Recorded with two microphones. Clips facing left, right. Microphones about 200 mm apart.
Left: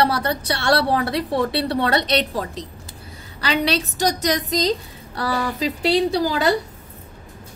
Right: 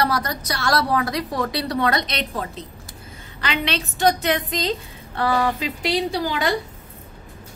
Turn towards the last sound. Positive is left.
turn(degrees=35)  # may be behind; listen again after turning